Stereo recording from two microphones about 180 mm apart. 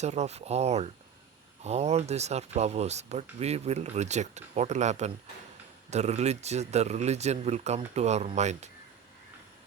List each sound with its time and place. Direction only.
0.0 s speech: 40° right (ahead or behind)